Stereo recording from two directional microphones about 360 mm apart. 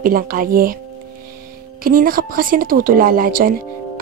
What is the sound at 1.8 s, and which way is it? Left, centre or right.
Speech, right.